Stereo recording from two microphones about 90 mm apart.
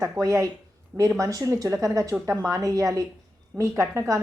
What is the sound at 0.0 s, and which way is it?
Speech, 35° right (ahead or behind).